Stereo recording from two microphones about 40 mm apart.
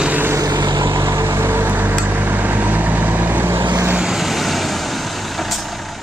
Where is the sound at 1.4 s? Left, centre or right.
Right.